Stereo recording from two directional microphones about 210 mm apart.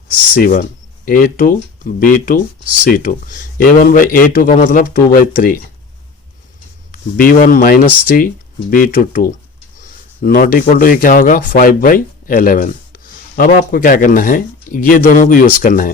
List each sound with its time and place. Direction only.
0.3 s speech: 45° left (ahead or behind)
6.9 s speech: 40° left (ahead or behind)
9.8 s a sound: 45° left (ahead or behind)
10.7 s speech: 40° left (ahead or behind)